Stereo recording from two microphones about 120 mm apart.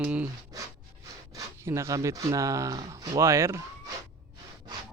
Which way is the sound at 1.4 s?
25° right (ahead or behind).